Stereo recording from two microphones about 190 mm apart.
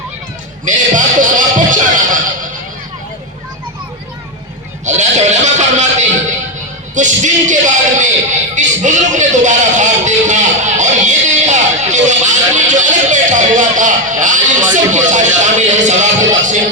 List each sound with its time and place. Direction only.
0.6 s music: 45° right (ahead or behind)
4.9 s music: 40° right (ahead or behind)